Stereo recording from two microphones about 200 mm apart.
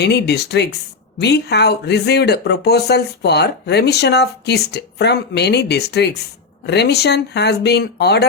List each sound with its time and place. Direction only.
0.0 s speech: 55° left (ahead or behind)